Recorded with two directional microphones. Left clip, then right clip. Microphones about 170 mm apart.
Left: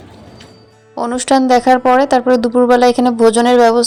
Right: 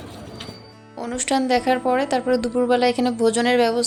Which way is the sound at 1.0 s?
40° left (ahead or behind).